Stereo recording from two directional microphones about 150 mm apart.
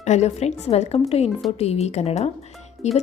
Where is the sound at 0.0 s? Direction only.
50° left (ahead or behind).